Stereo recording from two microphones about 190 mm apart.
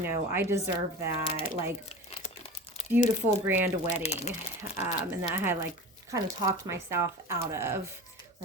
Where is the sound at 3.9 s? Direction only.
35° left (ahead or behind).